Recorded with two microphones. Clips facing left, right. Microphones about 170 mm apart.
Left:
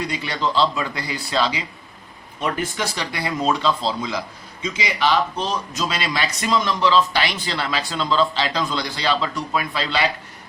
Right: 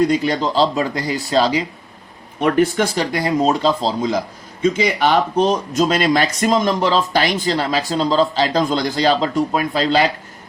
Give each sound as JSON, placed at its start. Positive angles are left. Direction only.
{"t": 0.0, "sound": "speech", "side_deg": -45}
{"t": 2.4, "sound": "speech", "side_deg": -55}